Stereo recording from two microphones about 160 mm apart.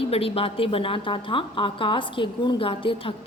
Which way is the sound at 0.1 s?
35° left (ahead or behind).